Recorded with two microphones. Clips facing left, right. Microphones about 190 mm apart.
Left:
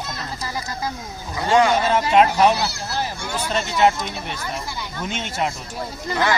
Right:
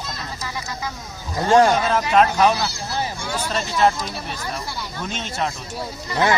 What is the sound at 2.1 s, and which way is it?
Speech, 5° left (ahead or behind).